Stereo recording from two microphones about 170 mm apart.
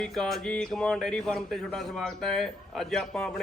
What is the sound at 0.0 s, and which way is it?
Speech, centre (ahead or behind).